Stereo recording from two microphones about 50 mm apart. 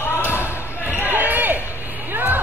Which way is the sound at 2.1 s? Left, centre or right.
Right.